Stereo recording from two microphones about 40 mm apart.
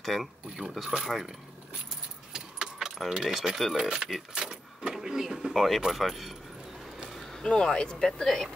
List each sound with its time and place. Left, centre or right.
0.0 s speech: centre
2.3 s keys jangling: centre
3.3 s speech: centre
3.7 s mechanisms: centre
4.3 s speech: right; by 6.3 s centre
7.1 s a sound: centre
7.4 s speech: left